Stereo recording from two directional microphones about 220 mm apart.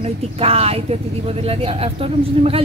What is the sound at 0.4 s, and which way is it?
Speech, 25° right (ahead or behind).